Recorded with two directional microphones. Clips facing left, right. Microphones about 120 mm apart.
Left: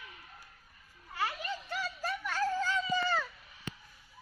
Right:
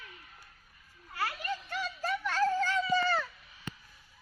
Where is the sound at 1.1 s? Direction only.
15° left (ahead or behind).